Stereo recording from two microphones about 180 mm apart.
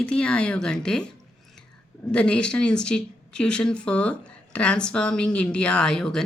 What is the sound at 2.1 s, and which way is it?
Speech, 5° left (ahead or behind).